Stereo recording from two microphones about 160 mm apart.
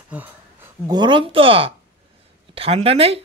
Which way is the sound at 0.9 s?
30° right (ahead or behind).